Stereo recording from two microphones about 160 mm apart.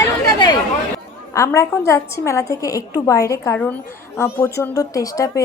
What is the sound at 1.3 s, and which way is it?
A woman's voice, 20° left (ahead or behind).